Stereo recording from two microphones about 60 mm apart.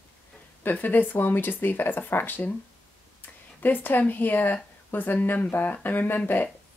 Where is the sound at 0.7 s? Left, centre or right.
Left.